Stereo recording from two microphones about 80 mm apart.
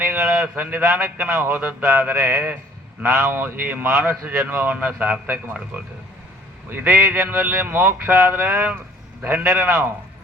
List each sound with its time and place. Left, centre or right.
0.0 s a sound: right
1.3 s speech: right
6.7 s speech: right